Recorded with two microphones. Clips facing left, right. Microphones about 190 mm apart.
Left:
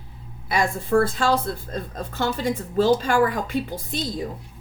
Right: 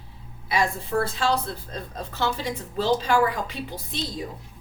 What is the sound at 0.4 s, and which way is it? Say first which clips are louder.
Speech: left 1 dB; 50° left (ahead or behind).